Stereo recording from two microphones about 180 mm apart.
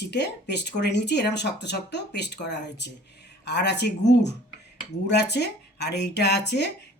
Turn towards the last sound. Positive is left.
turn(degrees=70)  # may be behind; listen again after turning